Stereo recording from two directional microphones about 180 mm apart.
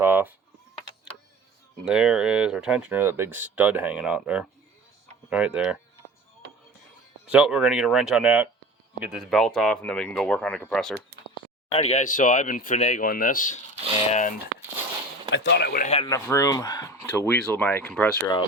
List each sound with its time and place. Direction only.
0.0 s speech: 10° right (ahead or behind)
1.8 s speech: 5° right (ahead or behind)
7.3 s speech: 5° right (ahead or behind)
11.7 s speech: 35° left (ahead or behind)
15.3 s speech: 70° left (ahead or behind)
15.8 s speech: 35° left (ahead or behind)
16.0 s speech: 15° left (ahead or behind)